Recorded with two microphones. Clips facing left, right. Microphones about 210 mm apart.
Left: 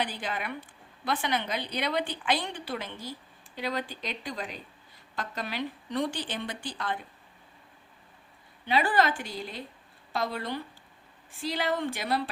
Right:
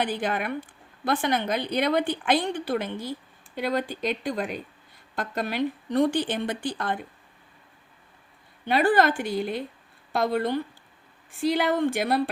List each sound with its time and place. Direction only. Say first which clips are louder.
0.0 s a woman's voice: right 6 dB; 55° right (ahead or behind)
8.6 s a woman's voice: right 5 dB; 50° right (ahead or behind)